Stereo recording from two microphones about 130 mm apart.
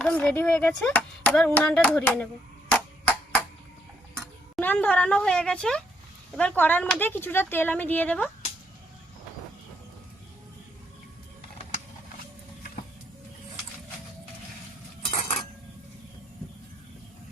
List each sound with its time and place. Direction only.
0.0 s speech: 10° left (ahead or behind)
2.7 s a sound: 10° left (ahead or behind)
4.6 s speech: 15° left (ahead or behind)
15.0 s dishes: 50° left (ahead or behind)